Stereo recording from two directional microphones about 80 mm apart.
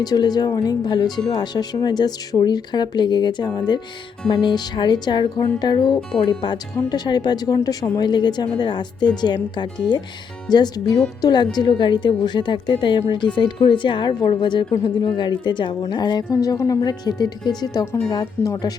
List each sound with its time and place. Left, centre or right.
0.0 s a woman's voice: left
15.9 s speech: left
16.3 s a woman's voice: left
18.4 s speech: left